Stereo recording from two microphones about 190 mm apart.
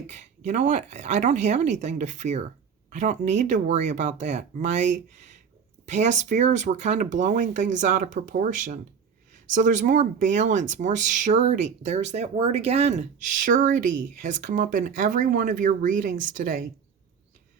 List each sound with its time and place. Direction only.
0.1 s speech: 40° right (ahead or behind)